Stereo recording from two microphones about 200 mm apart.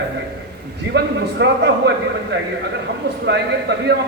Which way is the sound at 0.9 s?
55° right (ahead or behind).